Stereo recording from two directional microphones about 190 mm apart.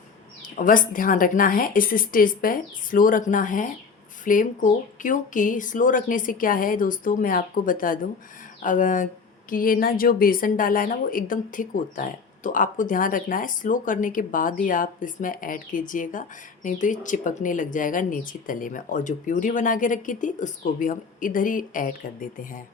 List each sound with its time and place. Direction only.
0.5 s speech: 45° left (ahead or behind)